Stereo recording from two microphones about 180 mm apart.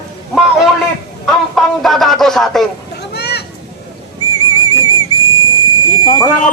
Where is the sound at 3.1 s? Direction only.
65° left (ahead or behind).